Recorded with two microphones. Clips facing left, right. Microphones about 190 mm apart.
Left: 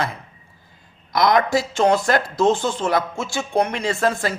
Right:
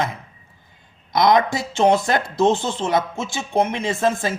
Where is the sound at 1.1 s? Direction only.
25° right (ahead or behind).